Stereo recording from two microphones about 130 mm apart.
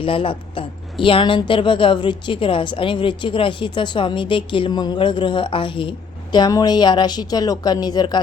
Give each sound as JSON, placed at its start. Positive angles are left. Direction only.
{"t": 0.0, "sound": "speech", "side_deg": 45}